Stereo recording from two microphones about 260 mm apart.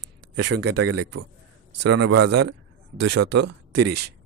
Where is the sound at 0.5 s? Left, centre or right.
Right.